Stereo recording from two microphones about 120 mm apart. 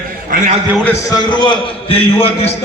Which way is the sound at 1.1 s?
35° left (ahead or behind).